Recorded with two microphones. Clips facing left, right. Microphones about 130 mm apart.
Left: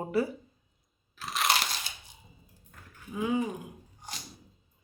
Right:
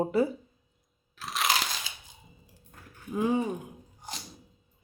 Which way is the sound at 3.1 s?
35° right (ahead or behind).